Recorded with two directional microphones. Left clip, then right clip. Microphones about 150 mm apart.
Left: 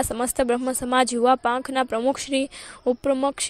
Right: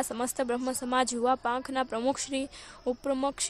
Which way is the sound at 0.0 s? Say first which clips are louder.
Left 8 dB; 30° left (ahead or behind).